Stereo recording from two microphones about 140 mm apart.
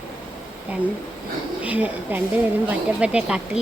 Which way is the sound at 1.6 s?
10° right (ahead or behind).